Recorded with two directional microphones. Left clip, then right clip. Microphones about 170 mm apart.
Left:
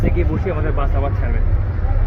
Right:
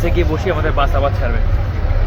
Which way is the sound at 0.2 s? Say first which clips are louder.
Right 5 dB; 20° right (ahead or behind).